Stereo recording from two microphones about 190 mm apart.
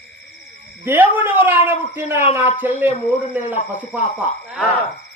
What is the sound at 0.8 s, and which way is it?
Speech, 10° right (ahead or behind).